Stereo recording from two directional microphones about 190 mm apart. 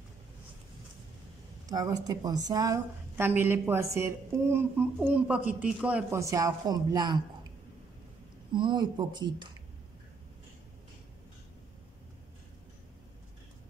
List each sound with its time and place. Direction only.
1.7 s a woman's voice: 20° right (ahead or behind)
8.5 s speech: 25° right (ahead or behind)